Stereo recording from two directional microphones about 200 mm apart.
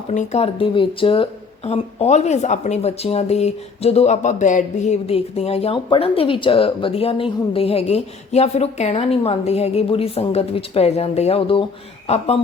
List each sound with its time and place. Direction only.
0.1 s speech: 35° left (ahead or behind)